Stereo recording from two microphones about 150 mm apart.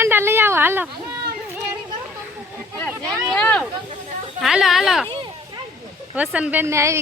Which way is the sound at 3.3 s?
5° left (ahead or behind).